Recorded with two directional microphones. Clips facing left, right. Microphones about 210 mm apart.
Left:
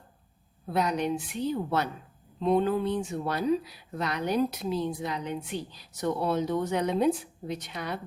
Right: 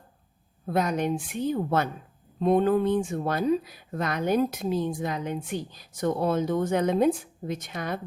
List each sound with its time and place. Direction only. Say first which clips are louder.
0.7 s speech: right 2 dB; 50° right (ahead or behind)